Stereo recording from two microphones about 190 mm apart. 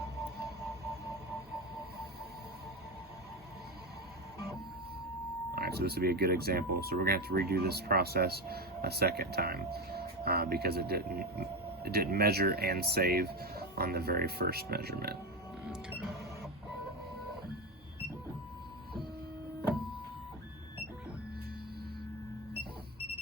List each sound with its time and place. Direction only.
5.5 s speech: 55° right (ahead or behind)
15.7 s printer: 5° right (ahead or behind)